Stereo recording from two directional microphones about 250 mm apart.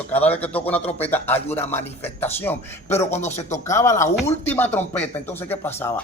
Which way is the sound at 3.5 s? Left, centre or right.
Centre.